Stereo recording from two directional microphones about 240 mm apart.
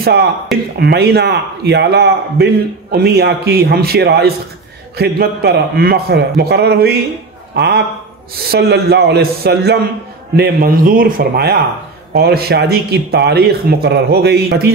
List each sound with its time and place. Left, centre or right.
0.0 s a man's voice: right